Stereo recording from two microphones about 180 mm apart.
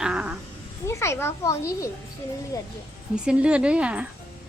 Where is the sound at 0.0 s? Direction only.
5° right (ahead or behind).